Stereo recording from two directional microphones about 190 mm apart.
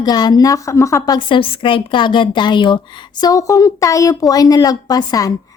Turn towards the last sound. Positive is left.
turn(degrees=20)  # may be behind; listen again after turning